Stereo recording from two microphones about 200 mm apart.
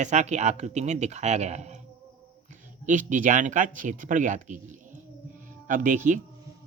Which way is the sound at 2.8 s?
40° right (ahead or behind).